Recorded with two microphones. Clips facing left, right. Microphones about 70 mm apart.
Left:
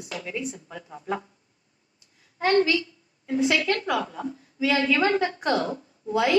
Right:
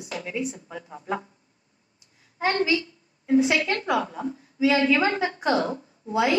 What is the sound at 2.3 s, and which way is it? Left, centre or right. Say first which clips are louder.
A woman's voice: left 2 dB; right.